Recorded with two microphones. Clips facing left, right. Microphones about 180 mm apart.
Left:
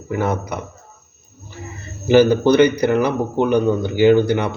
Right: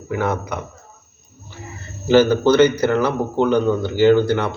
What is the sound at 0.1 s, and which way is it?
Speech, 10° left (ahead or behind).